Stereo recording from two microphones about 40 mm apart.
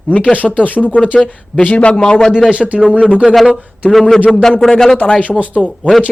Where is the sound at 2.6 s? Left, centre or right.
Centre.